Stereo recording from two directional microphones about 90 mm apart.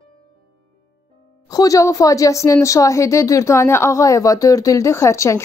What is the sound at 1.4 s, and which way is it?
Speech, 40° left (ahead or behind).